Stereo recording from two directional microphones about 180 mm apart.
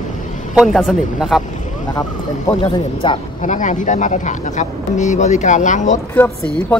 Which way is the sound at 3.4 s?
45° left (ahead or behind).